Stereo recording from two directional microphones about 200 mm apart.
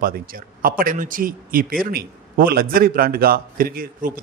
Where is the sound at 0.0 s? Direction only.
45° right (ahead or behind).